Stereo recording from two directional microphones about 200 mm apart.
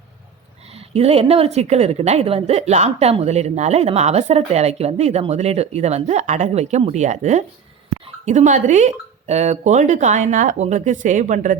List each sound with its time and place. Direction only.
0.7 s a woman's voice: 30° right (ahead or behind)